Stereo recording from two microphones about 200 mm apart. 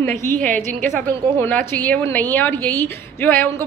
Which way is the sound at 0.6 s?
40° right (ahead or behind).